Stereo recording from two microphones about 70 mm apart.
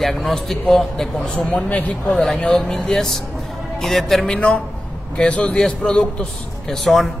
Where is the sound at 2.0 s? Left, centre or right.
Centre.